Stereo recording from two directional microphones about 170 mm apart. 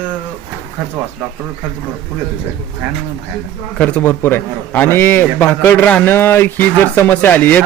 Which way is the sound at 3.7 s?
10° left (ahead or behind).